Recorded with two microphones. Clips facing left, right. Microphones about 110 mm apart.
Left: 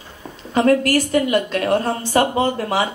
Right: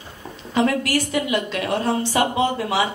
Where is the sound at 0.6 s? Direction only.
45° left (ahead or behind).